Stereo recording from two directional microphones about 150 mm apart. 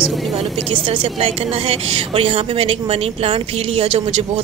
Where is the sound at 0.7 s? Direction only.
35° right (ahead or behind).